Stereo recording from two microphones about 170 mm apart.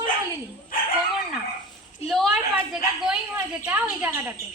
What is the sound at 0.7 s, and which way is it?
Speech, 55° left (ahead or behind).